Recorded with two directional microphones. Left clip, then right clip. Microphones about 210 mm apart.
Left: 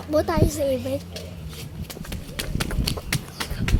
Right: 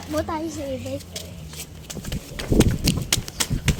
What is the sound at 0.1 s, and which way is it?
Speech, 50° left (ahead or behind).